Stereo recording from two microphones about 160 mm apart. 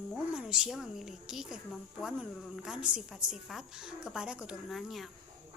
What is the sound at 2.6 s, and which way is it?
A woman's voice, 5° right (ahead or behind).